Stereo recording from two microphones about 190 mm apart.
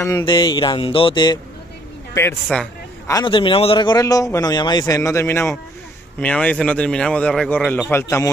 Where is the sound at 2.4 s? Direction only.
5° left (ahead or behind).